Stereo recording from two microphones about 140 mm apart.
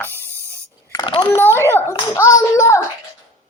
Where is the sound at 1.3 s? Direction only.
15° left (ahead or behind).